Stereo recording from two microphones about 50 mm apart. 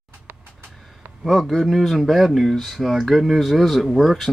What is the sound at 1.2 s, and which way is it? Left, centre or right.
Speech, centre.